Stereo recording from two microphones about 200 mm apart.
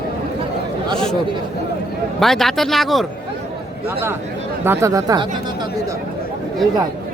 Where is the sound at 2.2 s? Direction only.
Centre (ahead or behind).